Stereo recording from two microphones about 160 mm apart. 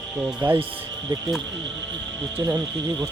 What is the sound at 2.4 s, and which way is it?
Speech, 25° right (ahead or behind).